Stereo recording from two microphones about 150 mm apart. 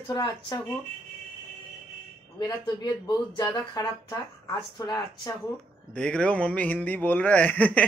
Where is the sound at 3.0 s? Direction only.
30° left (ahead or behind).